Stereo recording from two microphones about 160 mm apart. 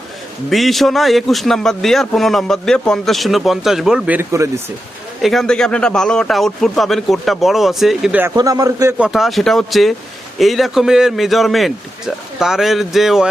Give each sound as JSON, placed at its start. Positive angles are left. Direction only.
{"t": 0.5, "sound": "a man's voice", "side_deg": 0}
{"t": 5.2, "sound": "a man's voice", "side_deg": 0}
{"t": 8.4, "sound": "speech", "side_deg": -25}
{"t": 9.0, "sound": "a man's voice", "side_deg": 0}